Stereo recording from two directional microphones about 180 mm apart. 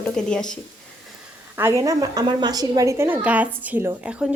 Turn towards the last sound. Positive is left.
turn(degrees=-5)  # may be behind; listen again after turning